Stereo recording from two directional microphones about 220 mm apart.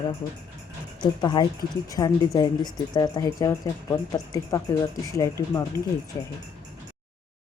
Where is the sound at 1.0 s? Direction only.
20° left (ahead or behind).